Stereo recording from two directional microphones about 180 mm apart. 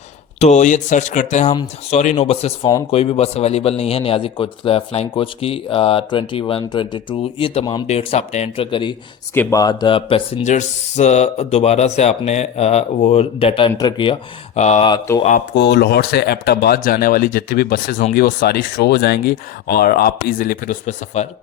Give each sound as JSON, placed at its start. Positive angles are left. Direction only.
{"t": 0.3, "sound": "a man's voice", "side_deg": 40}
{"t": 7.9, "sound": "a man's voice", "side_deg": 35}
{"t": 9.3, "sound": "a man's voice", "side_deg": 15}
{"t": 15.5, "sound": "speech", "side_deg": 65}